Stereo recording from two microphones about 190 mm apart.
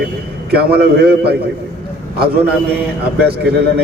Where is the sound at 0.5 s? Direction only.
55° right (ahead or behind).